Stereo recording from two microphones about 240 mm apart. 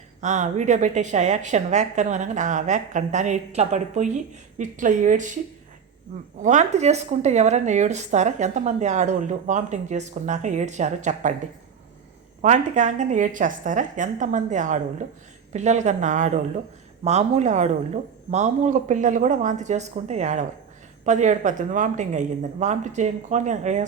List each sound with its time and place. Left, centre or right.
0.2 s a woman's voice: right
6.4 s speech: right
12.4 s a woman's voice: right